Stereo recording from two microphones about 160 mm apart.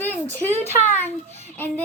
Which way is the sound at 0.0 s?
10° left (ahead or behind).